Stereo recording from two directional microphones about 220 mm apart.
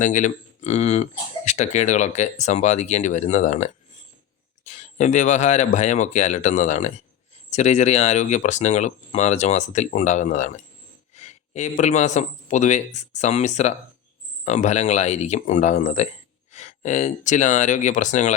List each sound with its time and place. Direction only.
0.0 s a man's voice: 35° left (ahead or behind)